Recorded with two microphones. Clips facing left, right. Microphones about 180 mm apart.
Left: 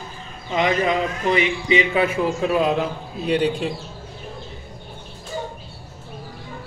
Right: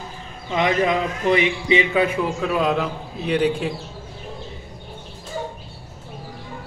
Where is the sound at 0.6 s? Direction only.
Centre (ahead or behind).